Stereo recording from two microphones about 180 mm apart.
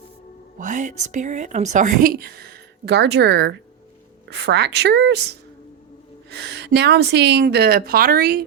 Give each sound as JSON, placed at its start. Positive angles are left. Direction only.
{"t": 0.6, "sound": "a woman's voice", "side_deg": -45}